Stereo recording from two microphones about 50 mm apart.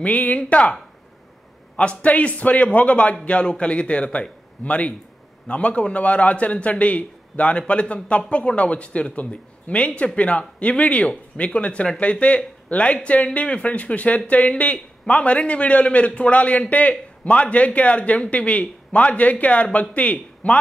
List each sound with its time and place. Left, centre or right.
0.0 s a man's voice: left
1.8 s a man's voice: left